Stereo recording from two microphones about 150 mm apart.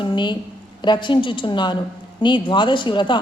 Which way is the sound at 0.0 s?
30° left (ahead or behind).